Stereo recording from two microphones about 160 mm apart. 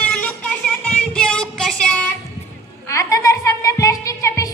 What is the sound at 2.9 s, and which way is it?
Music, 20° left (ahead or behind).